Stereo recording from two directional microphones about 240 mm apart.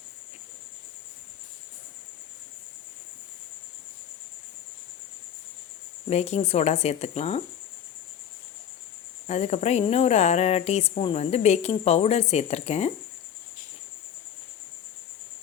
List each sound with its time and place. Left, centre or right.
6.1 s speech: left
9.2 s speech: left